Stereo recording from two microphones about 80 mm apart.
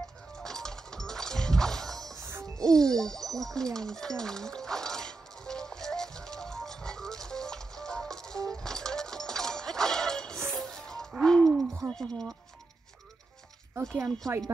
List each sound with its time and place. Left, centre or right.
0.0 s music: centre
2.1 s music: right
2.6 s music: centre
11.2 s hoot: centre
11.9 s speech: centre
13.9 s speech: centre